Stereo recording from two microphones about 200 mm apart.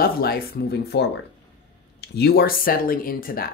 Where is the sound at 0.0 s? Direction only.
50° left (ahead or behind).